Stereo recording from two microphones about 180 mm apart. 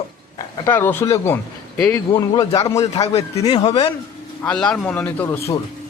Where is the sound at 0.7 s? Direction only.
10° left (ahead or behind).